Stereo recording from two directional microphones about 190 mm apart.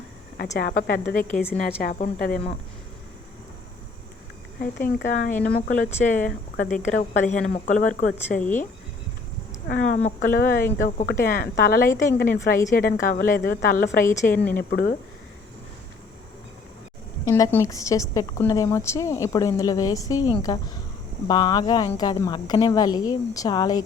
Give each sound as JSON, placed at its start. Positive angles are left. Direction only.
{"t": 0.7, "sound": "a woman's voice", "side_deg": 45}
{"t": 4.6, "sound": "a woman's voice", "side_deg": 50}
{"t": 8.4, "sound": "a woman's voice", "side_deg": 10}
{"t": 9.6, "sound": "a woman's voice", "side_deg": 50}
{"t": 14.1, "sound": "a woman's voice", "side_deg": 10}
{"t": 14.5, "sound": "a woman's voice", "side_deg": 50}
{"t": 17.2, "sound": "a woman's voice", "side_deg": 15}